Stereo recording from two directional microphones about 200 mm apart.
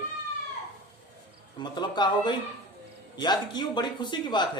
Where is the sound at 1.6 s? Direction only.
20° left (ahead or behind).